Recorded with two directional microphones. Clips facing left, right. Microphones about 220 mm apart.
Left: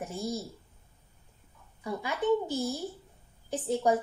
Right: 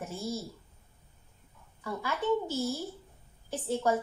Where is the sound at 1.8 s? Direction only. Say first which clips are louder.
Left 2 dB; 15° left (ahead or behind).